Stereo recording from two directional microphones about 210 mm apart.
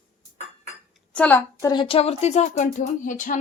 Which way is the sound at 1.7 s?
25° left (ahead or behind).